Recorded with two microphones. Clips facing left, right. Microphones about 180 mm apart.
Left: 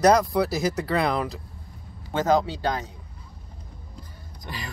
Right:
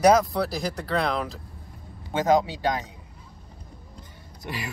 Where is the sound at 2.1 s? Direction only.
20° right (ahead or behind).